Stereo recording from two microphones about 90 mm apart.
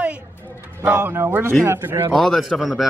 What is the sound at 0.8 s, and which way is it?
Speech, 25° right (ahead or behind).